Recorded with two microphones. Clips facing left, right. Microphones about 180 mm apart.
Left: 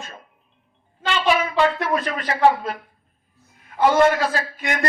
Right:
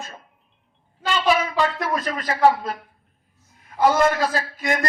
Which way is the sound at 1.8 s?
40° right (ahead or behind).